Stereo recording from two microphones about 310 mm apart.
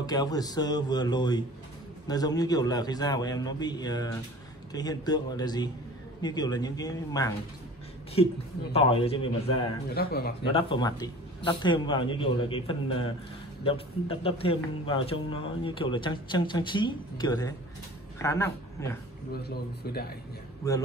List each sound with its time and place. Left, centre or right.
0.0 s a man's voice: centre
8.7 s a man's voice: centre
9.9 s speech: left
10.4 s a man's voice: centre
19.3 s speech: left
20.6 s a man's voice: centre